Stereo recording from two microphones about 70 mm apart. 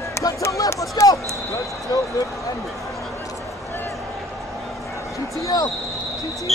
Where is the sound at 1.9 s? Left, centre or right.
Left.